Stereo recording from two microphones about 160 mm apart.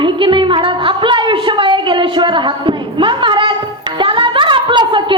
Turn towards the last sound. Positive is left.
turn(degrees=-30)  # may be behind; listen again after turning